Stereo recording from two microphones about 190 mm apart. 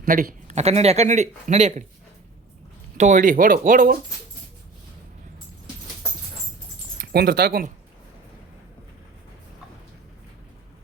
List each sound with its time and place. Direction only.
0.0 s speech: 45° right (ahead or behind)
3.0 s speech: 45° right (ahead or behind)
7.0 s speech: 55° right (ahead or behind)